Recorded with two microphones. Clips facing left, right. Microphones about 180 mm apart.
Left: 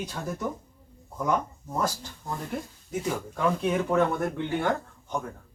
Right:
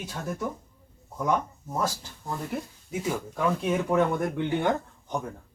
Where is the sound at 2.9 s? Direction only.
10° right (ahead or behind).